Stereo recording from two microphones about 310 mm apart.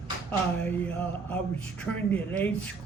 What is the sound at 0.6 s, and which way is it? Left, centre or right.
Speech, centre.